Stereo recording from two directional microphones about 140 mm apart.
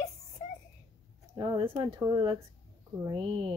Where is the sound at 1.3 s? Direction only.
30° right (ahead or behind).